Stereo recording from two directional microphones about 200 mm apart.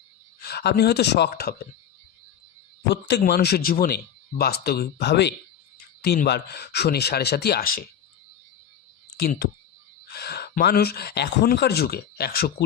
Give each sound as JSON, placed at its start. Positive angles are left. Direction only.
{"t": 0.4, "sound": "speech", "side_deg": 55}
{"t": 2.9, "sound": "speech", "side_deg": 55}
{"t": 10.1, "sound": "speech", "side_deg": 55}